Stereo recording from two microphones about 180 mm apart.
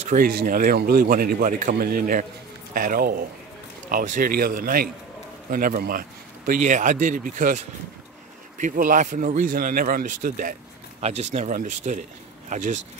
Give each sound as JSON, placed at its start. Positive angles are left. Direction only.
{"t": 0.1, "sound": "a man's voice", "side_deg": -55}
{"t": 11.0, "sound": "speech", "side_deg": -35}